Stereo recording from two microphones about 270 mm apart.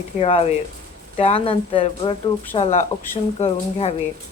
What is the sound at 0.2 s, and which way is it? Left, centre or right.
Speech, left.